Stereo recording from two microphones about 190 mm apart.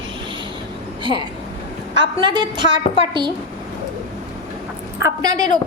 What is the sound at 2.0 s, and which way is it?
A woman's voice, 25° right (ahead or behind).